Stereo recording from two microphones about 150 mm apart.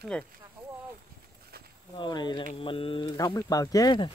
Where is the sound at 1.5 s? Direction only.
90° right.